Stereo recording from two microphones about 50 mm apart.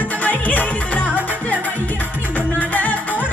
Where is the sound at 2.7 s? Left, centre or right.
Left.